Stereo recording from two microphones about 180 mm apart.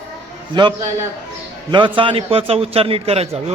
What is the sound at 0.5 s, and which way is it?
A man's voice, 25° right (ahead or behind).